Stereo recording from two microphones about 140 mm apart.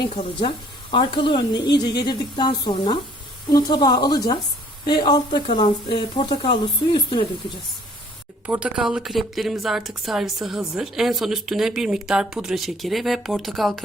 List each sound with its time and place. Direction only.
0.3 s a woman's voice: 40° left (ahead or behind)
8.4 s speech: 10° right (ahead or behind)